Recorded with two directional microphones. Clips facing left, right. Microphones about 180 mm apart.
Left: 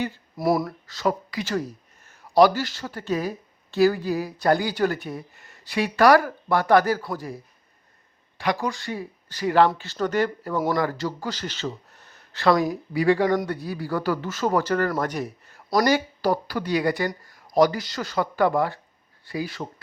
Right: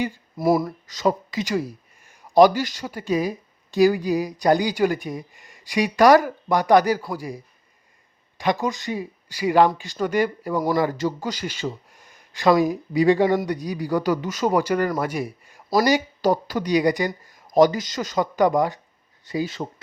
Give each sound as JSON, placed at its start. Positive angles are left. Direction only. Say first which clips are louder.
{"t": 0.3, "sound": "speech", "louder": "right 3 dB", "side_deg": 0}
{"t": 0.9, "sound": "a man's voice", "louder": "right 4 dB", "side_deg": -20}